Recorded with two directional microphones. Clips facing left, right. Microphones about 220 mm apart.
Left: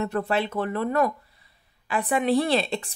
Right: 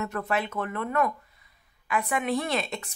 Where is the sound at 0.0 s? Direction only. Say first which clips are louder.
Left 4 dB; 30° left (ahead or behind).